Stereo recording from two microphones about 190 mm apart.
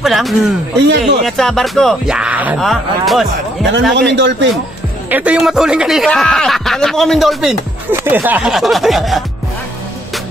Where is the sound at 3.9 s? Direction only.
65° right (ahead or behind).